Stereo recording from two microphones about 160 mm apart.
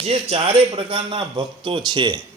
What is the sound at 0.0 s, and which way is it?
A man's voice, 40° right (ahead or behind).